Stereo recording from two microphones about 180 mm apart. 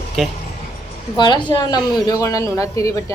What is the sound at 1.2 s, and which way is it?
A man's voice, 25° left (ahead or behind).